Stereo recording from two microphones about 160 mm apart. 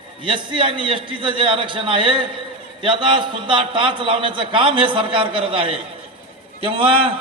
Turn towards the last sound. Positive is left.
turn(degrees=-35)  # may be behind; listen again after turning